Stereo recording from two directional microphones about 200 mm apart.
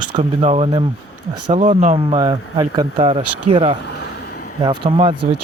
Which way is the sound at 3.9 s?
55° left (ahead or behind).